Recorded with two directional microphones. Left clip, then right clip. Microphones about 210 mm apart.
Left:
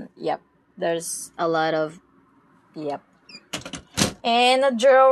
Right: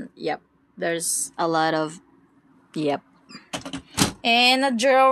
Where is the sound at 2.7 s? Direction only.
40° right (ahead or behind).